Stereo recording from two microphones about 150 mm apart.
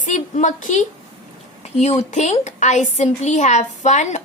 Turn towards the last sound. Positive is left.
turn(degrees=50)  # may be behind; listen again after turning